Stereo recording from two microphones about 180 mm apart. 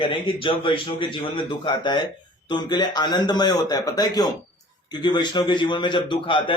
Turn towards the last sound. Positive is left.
turn(degrees=25)  # may be behind; listen again after turning